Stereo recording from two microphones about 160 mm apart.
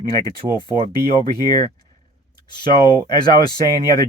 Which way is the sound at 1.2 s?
25° left (ahead or behind).